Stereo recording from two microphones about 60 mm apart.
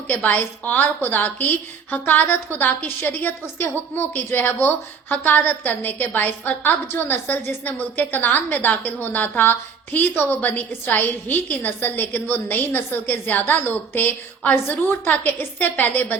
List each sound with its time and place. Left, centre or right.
0.1 s a woman's voice: left